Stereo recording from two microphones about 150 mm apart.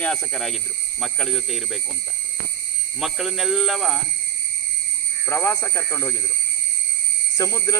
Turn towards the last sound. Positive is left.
turn(degrees=20)  # may be behind; listen again after turning